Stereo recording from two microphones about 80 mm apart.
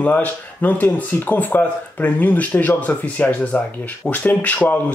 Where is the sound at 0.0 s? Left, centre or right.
Left.